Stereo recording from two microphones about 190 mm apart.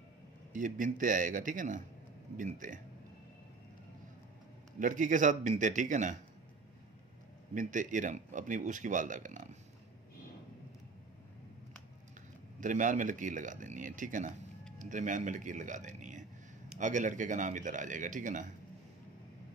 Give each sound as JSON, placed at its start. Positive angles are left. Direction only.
{"t": 0.5, "sound": "speech", "side_deg": -45}
{"t": 4.7, "sound": "speech", "side_deg": -45}
{"t": 7.5, "sound": "speech", "side_deg": -45}
{"t": 12.5, "sound": "speech", "side_deg": -45}